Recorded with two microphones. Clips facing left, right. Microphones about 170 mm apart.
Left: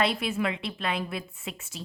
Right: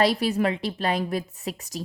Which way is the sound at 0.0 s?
35° right (ahead or behind).